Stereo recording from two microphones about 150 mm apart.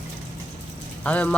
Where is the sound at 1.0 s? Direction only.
10° left (ahead or behind).